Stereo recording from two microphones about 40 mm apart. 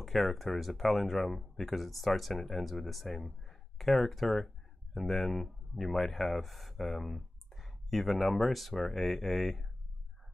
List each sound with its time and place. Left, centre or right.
0.0 s speech: centre